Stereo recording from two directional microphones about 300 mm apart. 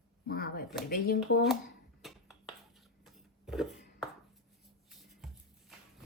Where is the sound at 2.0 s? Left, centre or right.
Centre.